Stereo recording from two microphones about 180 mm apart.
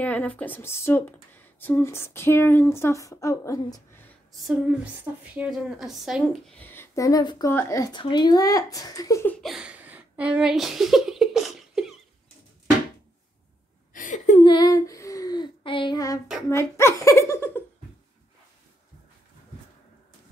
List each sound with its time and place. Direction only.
0.0 s speech: 10° left (ahead or behind)
5.3 s a woman's voice: 5° right (ahead or behind)
6.6 s speech: 10° left (ahead or behind)
9.4 s speech: 5° right (ahead or behind)
13.9 s a sound: 45° left (ahead or behind)
14.4 s child singing: 25° left (ahead or behind)
16.4 s speech: 15° left (ahead or behind)